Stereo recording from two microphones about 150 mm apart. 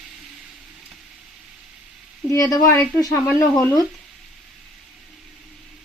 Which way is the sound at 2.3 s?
20° left (ahead or behind).